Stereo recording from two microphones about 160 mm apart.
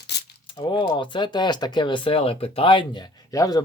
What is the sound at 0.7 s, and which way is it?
Speech, 30° left (ahead or behind).